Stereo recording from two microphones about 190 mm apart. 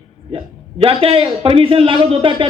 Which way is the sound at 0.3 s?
30° right (ahead or behind).